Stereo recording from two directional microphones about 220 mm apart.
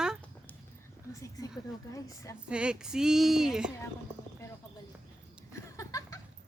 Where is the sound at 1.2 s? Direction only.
15° left (ahead or behind).